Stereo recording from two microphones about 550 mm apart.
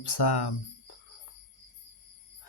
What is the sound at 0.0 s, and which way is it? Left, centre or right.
Speech, left.